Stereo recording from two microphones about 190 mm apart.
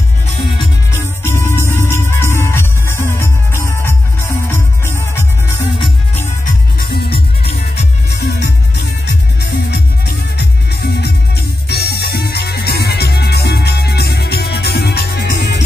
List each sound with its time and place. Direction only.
0.9 s music: 15° left (ahead or behind)
6.9 s music: 55° left (ahead or behind)
9.0 s music: 60° left (ahead or behind)